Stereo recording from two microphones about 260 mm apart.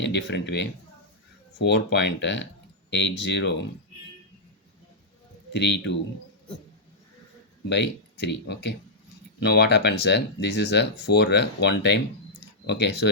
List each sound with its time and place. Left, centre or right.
0.0 s speech: left
5.5 s speech: left
7.7 s speech: left